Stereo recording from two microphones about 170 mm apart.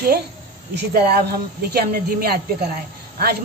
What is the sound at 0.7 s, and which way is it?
Speech, 65° right (ahead or behind).